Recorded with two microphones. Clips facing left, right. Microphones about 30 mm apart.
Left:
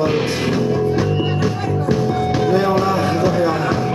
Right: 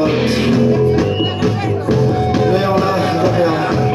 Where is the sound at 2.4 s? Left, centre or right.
Right.